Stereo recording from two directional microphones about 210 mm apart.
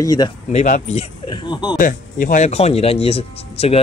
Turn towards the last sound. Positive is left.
turn(degrees=30)  # may be behind; listen again after turning